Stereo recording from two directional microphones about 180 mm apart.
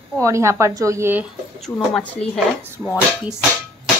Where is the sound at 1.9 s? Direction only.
5° left (ahead or behind).